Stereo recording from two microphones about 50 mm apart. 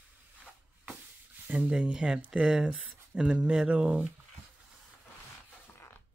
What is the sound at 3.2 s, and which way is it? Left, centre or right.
Speech, centre.